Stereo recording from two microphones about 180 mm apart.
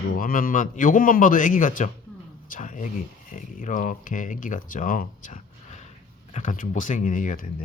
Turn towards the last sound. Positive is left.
turn(degrees=45)  # may be behind; listen again after turning